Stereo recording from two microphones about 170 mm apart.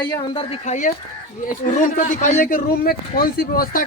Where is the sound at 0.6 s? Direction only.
45° left (ahead or behind).